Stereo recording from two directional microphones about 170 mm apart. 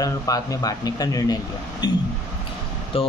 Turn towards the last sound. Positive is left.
turn(degrees=35)  # may be behind; listen again after turning